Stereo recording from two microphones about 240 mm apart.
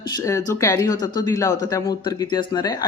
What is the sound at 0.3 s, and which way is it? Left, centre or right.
A woman's voice, centre.